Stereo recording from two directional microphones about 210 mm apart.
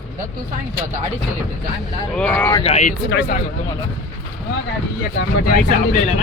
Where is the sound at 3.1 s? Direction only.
50° left (ahead or behind).